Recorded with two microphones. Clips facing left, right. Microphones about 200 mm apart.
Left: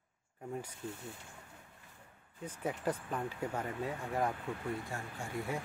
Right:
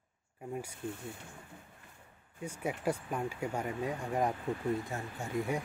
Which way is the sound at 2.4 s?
10° right (ahead or behind).